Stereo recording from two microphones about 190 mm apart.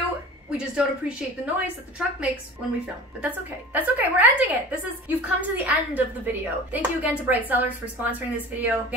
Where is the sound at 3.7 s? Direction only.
10° right (ahead or behind).